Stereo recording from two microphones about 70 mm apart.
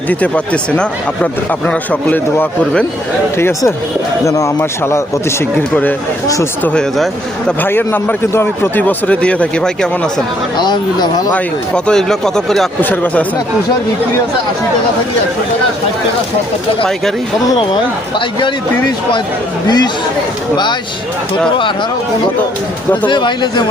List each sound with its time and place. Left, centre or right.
0.1 s speech: centre
4.3 s speech: left
6.7 s speech: centre
7.6 s speech: left
8.8 s speech: centre
10.6 s speech: left
11.3 s speech: centre
12.8 s speech: left
19.6 s speech: left